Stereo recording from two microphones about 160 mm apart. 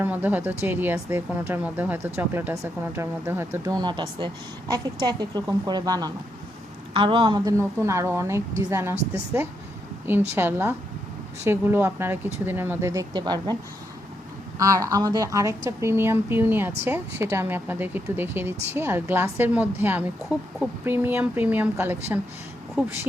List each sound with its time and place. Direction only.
0.0 s a woman's voice: 10° right (ahead or behind); by 13.6 s 25° right (ahead or behind)
14.6 s a woman's voice: 20° right (ahead or behind)